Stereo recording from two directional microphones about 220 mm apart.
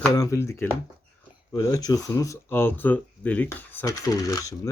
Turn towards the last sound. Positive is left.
turn(degrees=15)  # may be behind; listen again after turning